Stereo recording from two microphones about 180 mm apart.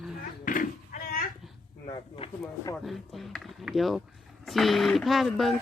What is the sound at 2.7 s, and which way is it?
Speech, centre (ahead or behind).